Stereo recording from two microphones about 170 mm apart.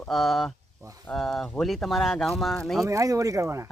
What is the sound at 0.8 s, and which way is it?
Speech, 20° right (ahead or behind).